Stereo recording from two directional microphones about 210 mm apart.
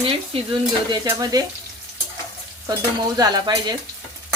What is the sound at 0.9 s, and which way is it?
Stir, 15° right (ahead or behind).